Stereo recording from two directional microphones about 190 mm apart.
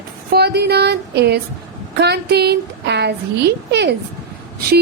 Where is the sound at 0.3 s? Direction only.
55° right (ahead or behind).